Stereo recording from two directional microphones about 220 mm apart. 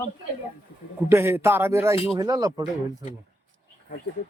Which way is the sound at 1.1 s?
10° right (ahead or behind).